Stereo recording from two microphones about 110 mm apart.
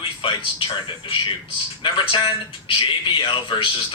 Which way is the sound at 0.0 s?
50° left (ahead or behind).